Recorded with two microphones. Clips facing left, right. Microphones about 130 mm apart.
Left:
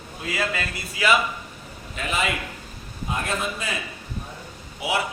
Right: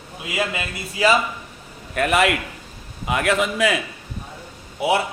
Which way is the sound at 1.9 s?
65° right (ahead or behind).